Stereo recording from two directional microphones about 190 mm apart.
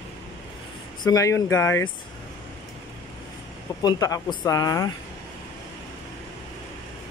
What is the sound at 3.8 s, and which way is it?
Speech, 20° left (ahead or behind).